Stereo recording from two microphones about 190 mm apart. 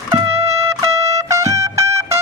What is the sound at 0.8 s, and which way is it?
Trumpet, 15° right (ahead or behind).